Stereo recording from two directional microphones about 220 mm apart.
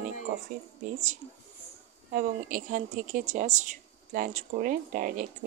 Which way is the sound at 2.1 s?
40° right (ahead or behind).